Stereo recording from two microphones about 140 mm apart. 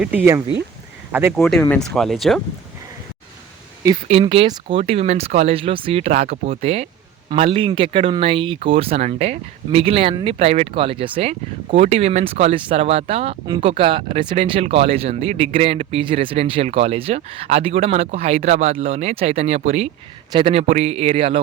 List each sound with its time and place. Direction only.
0.0 s speech: 10° right (ahead or behind)
1.7 s speech: 5° left (ahead or behind)
4.1 s speech: 40° right (ahead or behind)
6.2 s speech: 75° right (ahead or behind)
6.6 s speech: 50° right (ahead or behind)
20.3 s speech: 40° right (ahead or behind)